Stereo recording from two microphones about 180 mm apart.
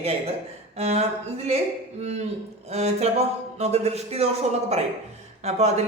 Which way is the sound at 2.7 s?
35° right (ahead or behind).